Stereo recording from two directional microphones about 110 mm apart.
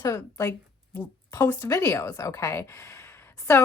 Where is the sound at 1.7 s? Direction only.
25° left (ahead or behind).